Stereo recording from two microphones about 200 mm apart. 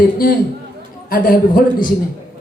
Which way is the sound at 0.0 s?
45° left (ahead or behind).